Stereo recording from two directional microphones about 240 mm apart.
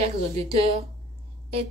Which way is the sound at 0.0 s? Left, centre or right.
Right.